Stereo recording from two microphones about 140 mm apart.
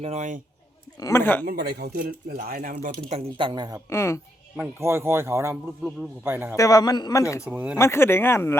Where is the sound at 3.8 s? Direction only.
20° left (ahead or behind).